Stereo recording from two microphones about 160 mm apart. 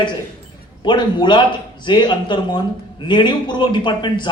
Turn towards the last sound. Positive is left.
turn(degrees=30)  # may be behind; listen again after turning